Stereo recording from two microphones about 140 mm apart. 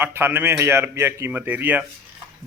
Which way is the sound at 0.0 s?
15° right (ahead or behind).